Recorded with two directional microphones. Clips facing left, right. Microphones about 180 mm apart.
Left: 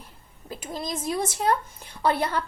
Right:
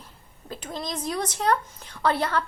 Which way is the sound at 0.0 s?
10° left (ahead or behind).